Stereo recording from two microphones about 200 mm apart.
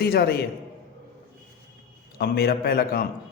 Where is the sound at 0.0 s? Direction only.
50° left (ahead or behind).